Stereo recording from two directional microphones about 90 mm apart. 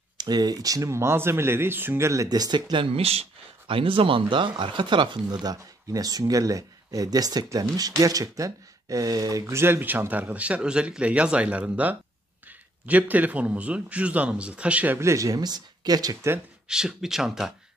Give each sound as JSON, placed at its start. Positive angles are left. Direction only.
{"t": 0.2, "sound": "speech", "side_deg": -50}
{"t": 2.2, "sound": "speech", "side_deg": -45}
{"t": 2.7, "sound": "a man's voice", "side_deg": -85}
{"t": 15.0, "sound": "speech", "side_deg": -35}
{"t": 16.6, "sound": "speech", "side_deg": -5}